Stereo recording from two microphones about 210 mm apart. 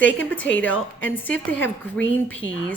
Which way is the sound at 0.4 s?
60° left (ahead or behind).